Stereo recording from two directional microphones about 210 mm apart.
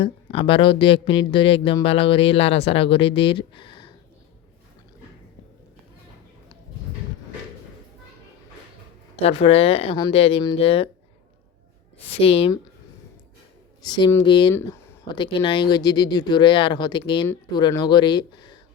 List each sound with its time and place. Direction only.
0.0 s speech: 25° left (ahead or behind)
9.2 s speech: 25° left (ahead or behind)
12.0 s speech: 25° left (ahead or behind)
13.8 s speech: 20° left (ahead or behind)